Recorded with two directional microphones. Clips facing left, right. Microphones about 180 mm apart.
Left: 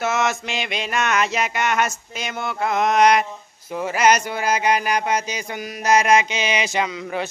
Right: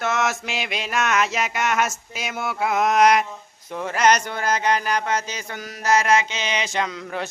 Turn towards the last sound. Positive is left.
turn(degrees=5)  # may be behind; listen again after turning